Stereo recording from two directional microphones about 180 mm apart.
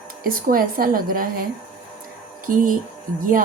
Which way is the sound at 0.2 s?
50° right (ahead or behind).